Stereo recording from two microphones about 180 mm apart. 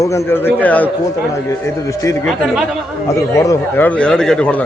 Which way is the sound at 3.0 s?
15° left (ahead or behind).